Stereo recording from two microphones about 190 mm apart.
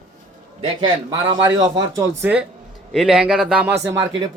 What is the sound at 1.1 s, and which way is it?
A man's voice, 25° right (ahead or behind).